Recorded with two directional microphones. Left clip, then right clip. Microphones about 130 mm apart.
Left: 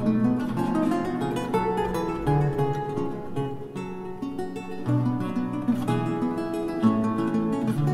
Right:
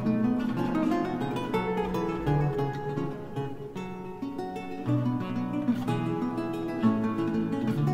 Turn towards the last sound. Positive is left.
turn(degrees=-30)  # may be behind; listen again after turning